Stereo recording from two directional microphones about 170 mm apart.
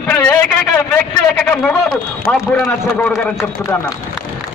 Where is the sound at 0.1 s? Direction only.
10° left (ahead or behind).